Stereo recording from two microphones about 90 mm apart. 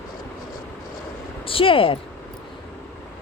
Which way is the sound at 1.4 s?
90° left.